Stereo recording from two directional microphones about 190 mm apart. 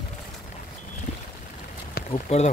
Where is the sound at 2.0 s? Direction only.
55° left (ahead or behind).